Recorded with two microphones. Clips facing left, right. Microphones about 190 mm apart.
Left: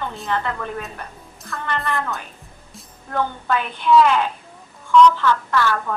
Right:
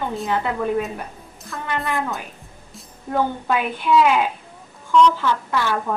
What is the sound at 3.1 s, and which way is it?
A woman's voice, 10° right (ahead or behind).